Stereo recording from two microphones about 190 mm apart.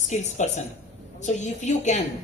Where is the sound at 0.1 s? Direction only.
40° left (ahead or behind).